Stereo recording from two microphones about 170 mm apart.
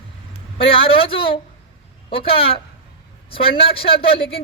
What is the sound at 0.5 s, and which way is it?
A man's voice, 35° left (ahead or behind).